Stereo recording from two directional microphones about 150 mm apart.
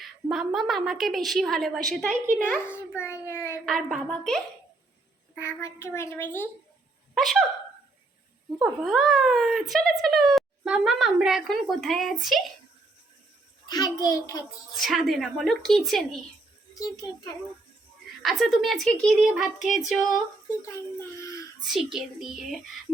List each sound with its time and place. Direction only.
0.0 s a woman's voice: centre (ahead or behind)
2.0 s speech: 60° right (ahead or behind)
2.9 s child singing: 15° left (ahead or behind)
3.7 s a woman's voice: centre (ahead or behind)
5.3 s a woman's voice: 15° left (ahead or behind)
7.2 s a woman's voice: centre (ahead or behind)
8.8 s a woman's voice: centre (ahead or behind)
13.7 s a child's voice: 25° left (ahead or behind)
14.8 s a woman's voice: centre (ahead or behind)
16.7 s a child's voice: 25° left (ahead or behind)
18.2 s a woman's voice: centre (ahead or behind)
21.2 s a sound: 20° left (ahead or behind)
21.6 s a child's voice: centre (ahead or behind)